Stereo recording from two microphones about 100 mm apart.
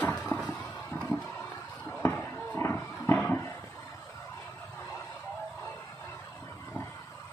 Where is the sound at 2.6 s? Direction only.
20° left (ahead or behind).